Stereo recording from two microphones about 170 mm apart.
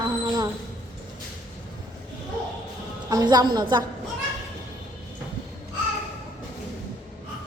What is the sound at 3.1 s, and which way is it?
Speech, 25° right (ahead or behind).